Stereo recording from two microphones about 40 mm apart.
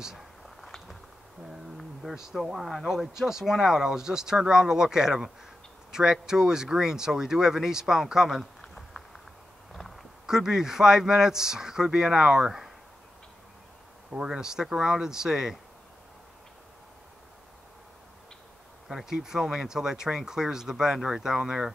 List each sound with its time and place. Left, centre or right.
2.1 s speech: centre
5.9 s a sound: centre
6.2 s speech: centre
8.5 s a sound: centre
10.2 s speech: centre
14.1 s speech: centre
18.9 s speech: centre